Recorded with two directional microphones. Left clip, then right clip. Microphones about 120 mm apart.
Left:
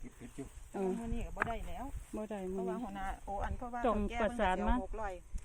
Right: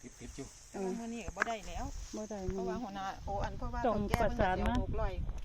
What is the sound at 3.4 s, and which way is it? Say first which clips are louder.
Speech: even; 30° left (ahead or behind).